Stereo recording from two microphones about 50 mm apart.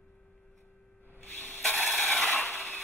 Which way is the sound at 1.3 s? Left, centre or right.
Left.